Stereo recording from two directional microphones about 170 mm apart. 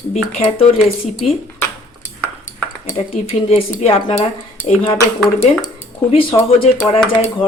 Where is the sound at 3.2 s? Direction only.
40° left (ahead or behind).